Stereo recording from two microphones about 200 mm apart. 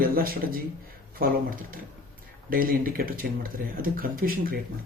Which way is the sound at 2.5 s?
45° right (ahead or behind).